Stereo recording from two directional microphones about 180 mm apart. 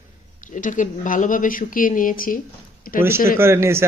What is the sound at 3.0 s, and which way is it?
Speech, 15° right (ahead or behind).